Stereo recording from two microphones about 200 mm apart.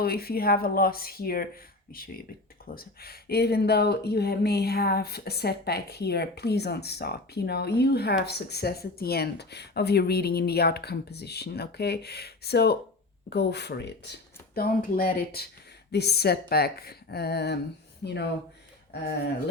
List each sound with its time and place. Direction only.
0.0 s speech: 50° left (ahead or behind)